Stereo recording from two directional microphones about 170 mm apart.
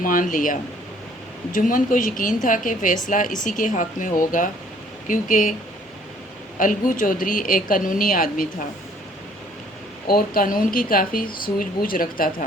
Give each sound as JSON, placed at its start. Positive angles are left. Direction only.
{"t": 0.0, "sound": "a woman's voice", "side_deg": 50}
{"t": 6.6, "sound": "a woman's voice", "side_deg": 50}
{"t": 10.1, "sound": "a woman's voice", "side_deg": 55}